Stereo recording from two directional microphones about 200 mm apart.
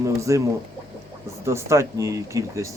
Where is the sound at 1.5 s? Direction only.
15° right (ahead or behind).